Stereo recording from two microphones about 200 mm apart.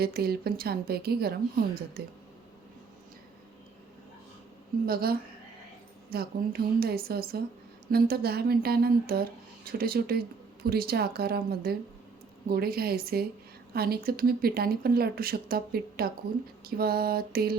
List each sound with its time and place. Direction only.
0.0 s speech: 50° right (ahead or behind)
4.9 s speech: 50° right (ahead or behind)